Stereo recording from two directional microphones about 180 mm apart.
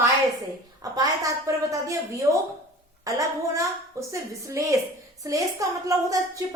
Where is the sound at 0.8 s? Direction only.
20° right (ahead or behind).